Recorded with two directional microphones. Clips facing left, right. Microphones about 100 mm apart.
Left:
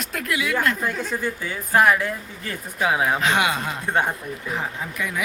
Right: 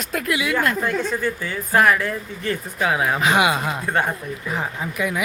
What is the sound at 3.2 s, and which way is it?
Speech, 10° right (ahead or behind).